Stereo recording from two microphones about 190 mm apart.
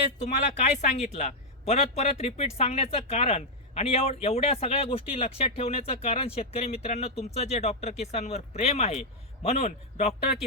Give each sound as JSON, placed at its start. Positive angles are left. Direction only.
{"t": 0.2, "sound": "speech", "side_deg": 40}